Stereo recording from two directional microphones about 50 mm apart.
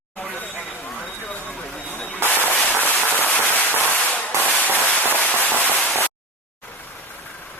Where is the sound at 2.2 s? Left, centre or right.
Left.